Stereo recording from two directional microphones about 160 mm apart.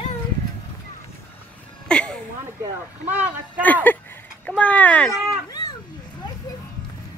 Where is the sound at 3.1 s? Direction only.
10° right (ahead or behind).